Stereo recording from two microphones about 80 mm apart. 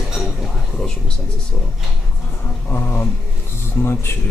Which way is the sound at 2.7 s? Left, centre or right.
Left.